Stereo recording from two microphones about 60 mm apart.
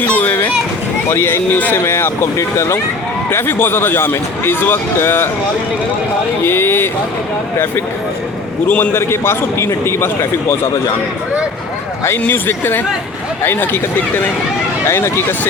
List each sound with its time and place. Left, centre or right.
0.0 s children playing: left
1.1 s a man's voice: left
3.2 s speech: left
6.4 s speech: left
8.6 s a man's voice: left
12.3 s speech: left
14.8 s a man's voice: left